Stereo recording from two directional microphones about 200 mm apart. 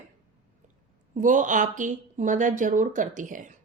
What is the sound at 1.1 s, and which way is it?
Speech, 40° right (ahead or behind).